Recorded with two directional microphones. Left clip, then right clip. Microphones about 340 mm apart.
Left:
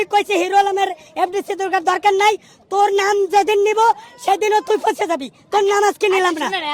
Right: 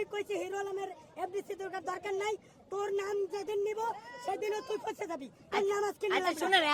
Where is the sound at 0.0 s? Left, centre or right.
Left.